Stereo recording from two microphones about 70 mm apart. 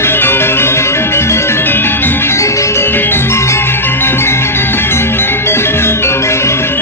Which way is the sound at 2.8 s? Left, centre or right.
Left.